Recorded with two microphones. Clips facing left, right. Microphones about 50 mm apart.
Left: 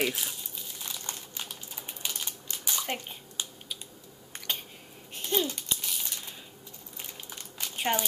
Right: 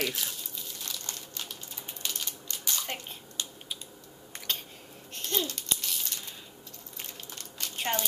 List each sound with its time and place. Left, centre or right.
0.0 s crumpling: centre
2.0 s a sound: centre
5.1 s babbling: centre
7.0 s crumpling: centre